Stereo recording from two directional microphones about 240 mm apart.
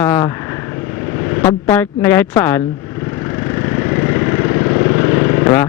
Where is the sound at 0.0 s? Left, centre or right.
Centre.